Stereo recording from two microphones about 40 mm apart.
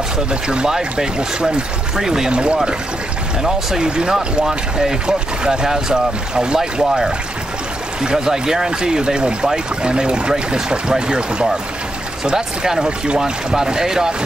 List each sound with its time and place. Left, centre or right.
0.3 s speech: right
2.3 s speech: right